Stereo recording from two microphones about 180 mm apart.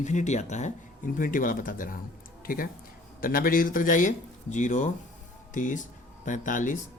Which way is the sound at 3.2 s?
50° left (ahead or behind).